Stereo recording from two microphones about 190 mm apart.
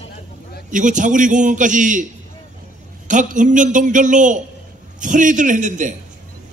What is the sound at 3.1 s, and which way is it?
A man's voice, 40° right (ahead or behind).